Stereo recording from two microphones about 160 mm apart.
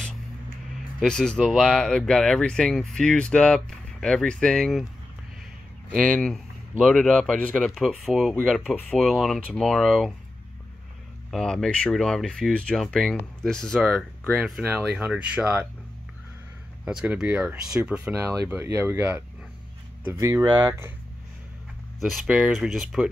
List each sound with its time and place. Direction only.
0.9 s speech: 5° left (ahead or behind)
5.9 s speech: 5° left (ahead or behind)
8.7 s speech: 10° left (ahead or behind)
9.0 s speech: centre (ahead or behind)
11.2 s speech: centre (ahead or behind)
16.8 s speech: 5° right (ahead or behind)
18.2 s speech: 15° right (ahead or behind)
22.0 s speech: centre (ahead or behind)